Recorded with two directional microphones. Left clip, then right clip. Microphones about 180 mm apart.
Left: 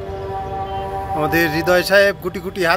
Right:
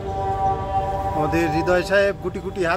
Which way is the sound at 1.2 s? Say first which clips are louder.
Left 5 dB; 25° left (ahead or behind).